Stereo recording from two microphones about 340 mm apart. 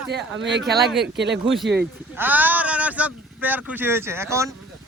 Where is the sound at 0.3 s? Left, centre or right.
Right.